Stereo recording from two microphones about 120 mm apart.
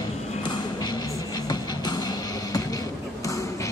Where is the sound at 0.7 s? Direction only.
35° left (ahead or behind).